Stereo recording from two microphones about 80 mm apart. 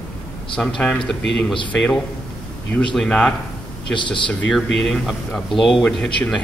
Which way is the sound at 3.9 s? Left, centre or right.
Left.